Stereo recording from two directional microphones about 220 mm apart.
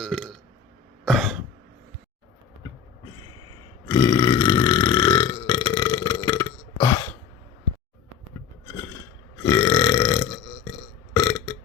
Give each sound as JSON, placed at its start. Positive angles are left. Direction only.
{"t": 0.0, "sound": "speech", "side_deg": 0}
{"t": 1.0, "sound": "cough", "side_deg": 0}
{"t": 3.8, "sound": "burping", "side_deg": 20}
{"t": 8.6, "sound": "a sound", "side_deg": 10}
{"t": 9.4, "sound": "burping", "side_deg": 20}